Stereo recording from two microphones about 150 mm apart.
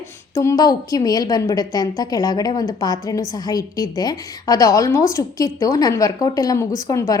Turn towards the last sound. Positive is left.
turn(degrees=20)  # may be behind; listen again after turning